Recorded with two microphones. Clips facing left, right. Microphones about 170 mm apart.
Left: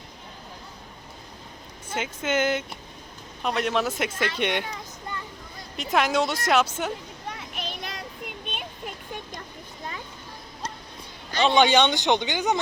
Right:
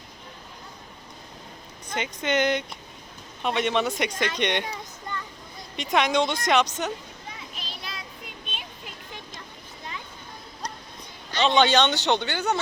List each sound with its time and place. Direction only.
1.9 s a woman's voice: 5° left (ahead or behind)
5.7 s a woman's voice: centre (ahead or behind)
7.3 s child singing: 60° left (ahead or behind)
11.3 s speech: 10° left (ahead or behind)